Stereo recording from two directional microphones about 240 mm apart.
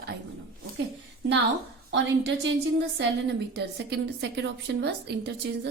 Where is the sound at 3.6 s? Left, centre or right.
Right.